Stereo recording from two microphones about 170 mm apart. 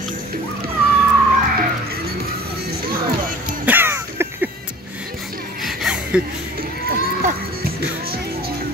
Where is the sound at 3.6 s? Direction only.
10° right (ahead or behind).